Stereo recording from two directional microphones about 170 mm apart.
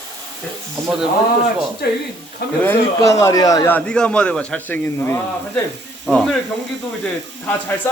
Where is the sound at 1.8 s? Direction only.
65° left (ahead or behind).